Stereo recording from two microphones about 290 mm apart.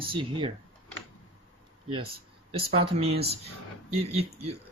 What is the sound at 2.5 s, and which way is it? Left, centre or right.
Speech, right.